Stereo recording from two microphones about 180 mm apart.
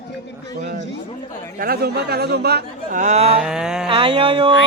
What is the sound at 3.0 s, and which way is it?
Speech, 40° right (ahead or behind).